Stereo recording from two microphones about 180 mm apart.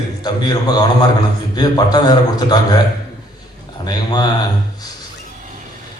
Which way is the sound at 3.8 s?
20° left (ahead or behind).